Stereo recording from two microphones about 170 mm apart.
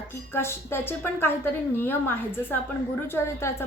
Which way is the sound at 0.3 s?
15° left (ahead or behind).